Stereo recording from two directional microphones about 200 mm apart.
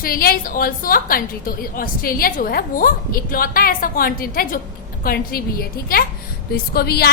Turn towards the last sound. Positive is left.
turn(degrees=50)  # may be behind; listen again after turning